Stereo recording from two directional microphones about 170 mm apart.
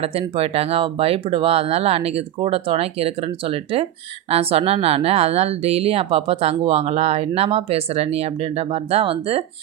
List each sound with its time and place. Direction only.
0.0 s a woman's voice: 35° right (ahead or behind)